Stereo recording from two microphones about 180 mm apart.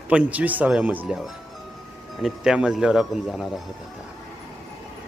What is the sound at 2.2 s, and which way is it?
Speech, 5° right (ahead or behind).